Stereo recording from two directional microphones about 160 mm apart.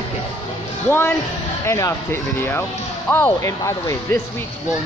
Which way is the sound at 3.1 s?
15° left (ahead or behind).